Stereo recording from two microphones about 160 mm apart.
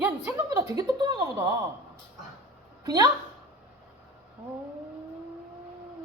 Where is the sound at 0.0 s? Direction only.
10° right (ahead or behind).